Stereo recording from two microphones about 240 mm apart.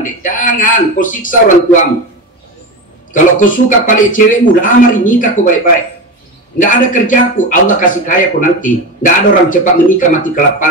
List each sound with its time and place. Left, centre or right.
0.0 s a man's voice: left
3.1 s a man's voice: left
6.6 s a man's voice: left